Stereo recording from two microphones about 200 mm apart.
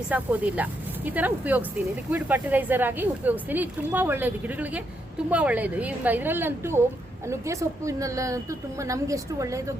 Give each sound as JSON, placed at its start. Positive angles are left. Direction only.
{"t": 0.1, "sound": "speech", "side_deg": -5}